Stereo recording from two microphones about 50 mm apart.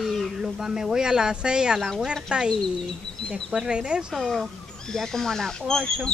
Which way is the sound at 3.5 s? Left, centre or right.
Centre.